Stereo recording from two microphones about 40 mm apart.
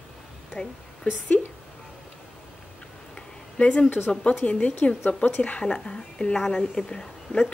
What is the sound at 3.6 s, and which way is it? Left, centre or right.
Speech, left.